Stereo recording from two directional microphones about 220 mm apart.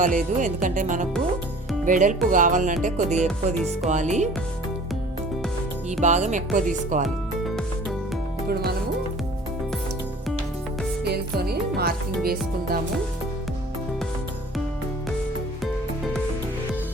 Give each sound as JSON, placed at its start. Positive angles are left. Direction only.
{"t": 0.0, "sound": "speech", "side_deg": -35}
{"t": 3.2, "sound": "music", "side_deg": 0}
{"t": 3.8, "sound": "speech", "side_deg": -35}
{"t": 6.0, "sound": "speech", "side_deg": -35}
{"t": 7.0, "sound": "music", "side_deg": 0}
{"t": 8.4, "sound": "speech", "side_deg": -45}
{"t": 11.0, "sound": "speech", "side_deg": -45}